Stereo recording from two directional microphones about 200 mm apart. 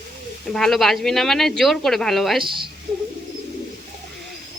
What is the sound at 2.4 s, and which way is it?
Speech, 25° right (ahead or behind).